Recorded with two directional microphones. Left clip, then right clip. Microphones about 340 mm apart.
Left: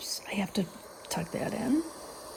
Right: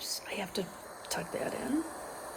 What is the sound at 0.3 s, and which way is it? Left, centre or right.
Speech, centre.